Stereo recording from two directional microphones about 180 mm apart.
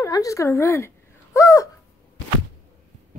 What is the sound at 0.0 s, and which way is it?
Speech, 20° left (ahead or behind).